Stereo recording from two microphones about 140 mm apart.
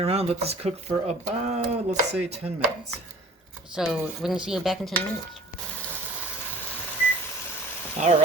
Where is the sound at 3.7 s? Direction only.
Centre (ahead or behind).